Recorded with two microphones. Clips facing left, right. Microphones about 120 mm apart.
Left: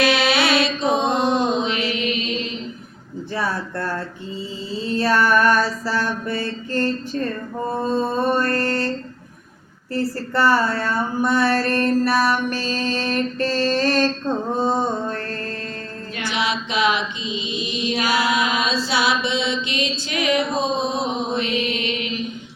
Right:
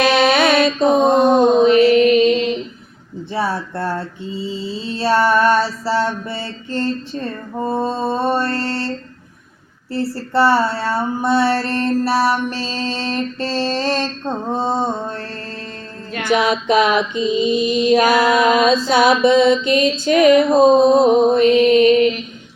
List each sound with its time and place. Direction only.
0.1 s music: 50° right (ahead or behind)
3.3 s mantra: 25° right (ahead or behind)
9.9 s mantra: 30° right (ahead or behind)
16.1 s music: 50° right (ahead or behind)